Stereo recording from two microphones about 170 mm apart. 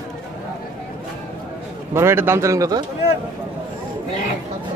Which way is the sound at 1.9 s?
15° right (ahead or behind).